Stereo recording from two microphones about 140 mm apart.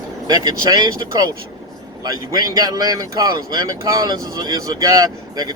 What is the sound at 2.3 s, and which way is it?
Speech, 30° right (ahead or behind).